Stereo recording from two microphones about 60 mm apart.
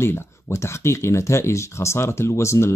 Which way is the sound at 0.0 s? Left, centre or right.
Left.